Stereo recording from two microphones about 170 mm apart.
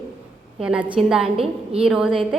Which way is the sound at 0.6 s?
5° right (ahead or behind).